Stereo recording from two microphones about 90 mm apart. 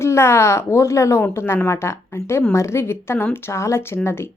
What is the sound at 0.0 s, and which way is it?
A woman's voice, 30° left (ahead or behind).